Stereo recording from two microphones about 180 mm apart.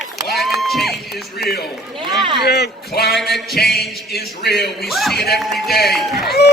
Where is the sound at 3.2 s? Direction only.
Centre (ahead or behind).